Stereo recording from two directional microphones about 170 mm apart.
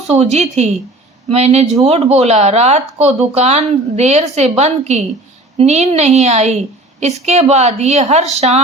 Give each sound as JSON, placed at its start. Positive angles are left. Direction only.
{"t": 0.1, "sound": "a woman's voice", "side_deg": -40}